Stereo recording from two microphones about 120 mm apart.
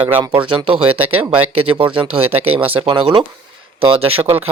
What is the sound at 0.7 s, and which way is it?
Speech, 50° right (ahead or behind).